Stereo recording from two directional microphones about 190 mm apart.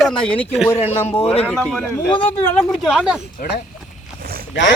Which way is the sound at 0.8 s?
35° left (ahead or behind).